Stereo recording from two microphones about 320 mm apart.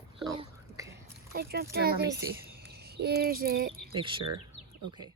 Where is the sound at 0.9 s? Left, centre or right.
Right.